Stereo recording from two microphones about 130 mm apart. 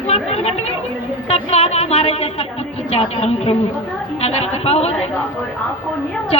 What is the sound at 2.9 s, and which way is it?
A woman's voice, 50° left (ahead or behind).